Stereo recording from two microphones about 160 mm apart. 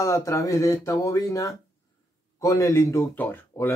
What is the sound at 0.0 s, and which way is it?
Speech, 20° left (ahead or behind).